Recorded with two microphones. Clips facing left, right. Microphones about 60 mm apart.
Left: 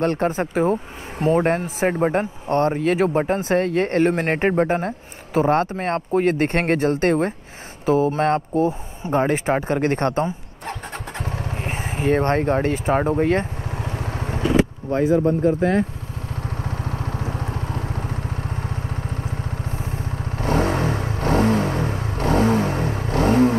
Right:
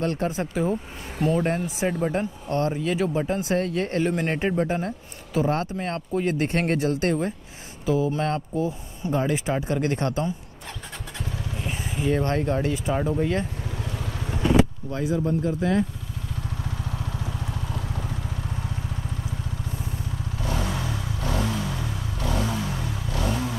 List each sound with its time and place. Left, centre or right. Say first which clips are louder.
0.0 s speech: left 5 dB; left
11.1 s vehicle: left 3 dB; left